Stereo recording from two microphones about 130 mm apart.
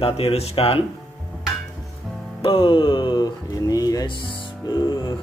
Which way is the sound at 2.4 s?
45° left (ahead or behind).